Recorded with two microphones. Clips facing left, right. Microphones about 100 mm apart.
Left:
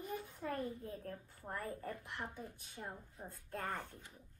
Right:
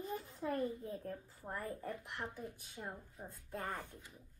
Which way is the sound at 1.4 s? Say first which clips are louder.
Even; 10° right (ahead or behind).